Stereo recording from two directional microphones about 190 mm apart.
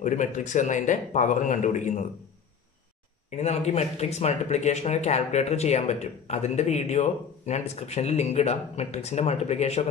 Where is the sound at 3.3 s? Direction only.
35° left (ahead or behind).